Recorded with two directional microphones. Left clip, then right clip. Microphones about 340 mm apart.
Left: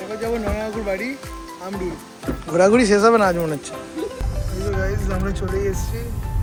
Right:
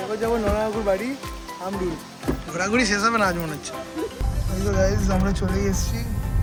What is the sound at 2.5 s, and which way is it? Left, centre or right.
Speech, centre.